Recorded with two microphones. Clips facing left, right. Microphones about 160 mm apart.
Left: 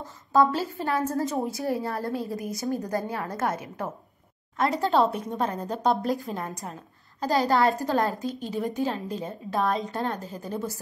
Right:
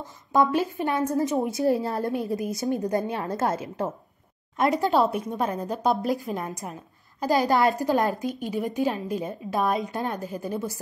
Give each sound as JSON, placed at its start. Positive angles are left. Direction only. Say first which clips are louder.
{"t": 0.3, "sound": "a woman's voice", "louder": "even", "side_deg": -20}
{"t": 4.6, "sound": "speech", "louder": "right 1 dB", "side_deg": -15}